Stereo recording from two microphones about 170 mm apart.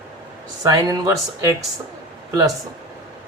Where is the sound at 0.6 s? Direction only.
20° right (ahead or behind).